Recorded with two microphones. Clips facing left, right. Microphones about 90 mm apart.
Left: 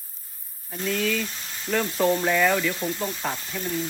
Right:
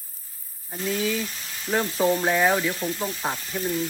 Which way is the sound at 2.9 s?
35° left (ahead or behind).